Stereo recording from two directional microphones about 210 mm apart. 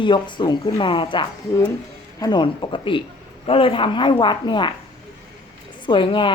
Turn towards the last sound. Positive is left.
turn(degrees=25)  # may be behind; listen again after turning